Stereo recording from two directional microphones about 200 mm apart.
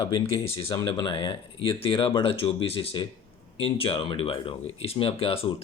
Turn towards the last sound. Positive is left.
turn(degrees=30)  # may be behind; listen again after turning